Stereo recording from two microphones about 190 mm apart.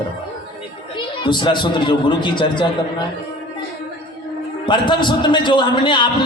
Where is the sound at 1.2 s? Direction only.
25° left (ahead or behind).